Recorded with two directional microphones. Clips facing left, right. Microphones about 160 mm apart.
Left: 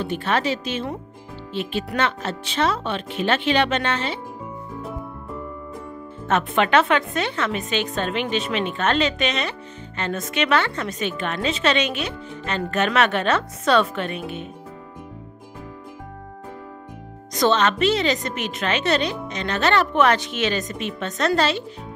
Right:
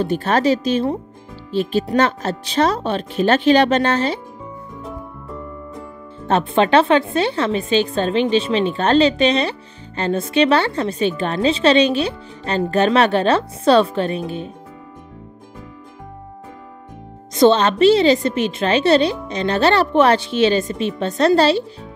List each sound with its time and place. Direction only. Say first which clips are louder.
0.0 s a woman's voice: right 6 dB; 40° right (ahead or behind)
6.2 s a woman's voice: right 4 dB; 30° right (ahead or behind)
17.3 s a woman's voice: right 6 dB; 30° right (ahead or behind)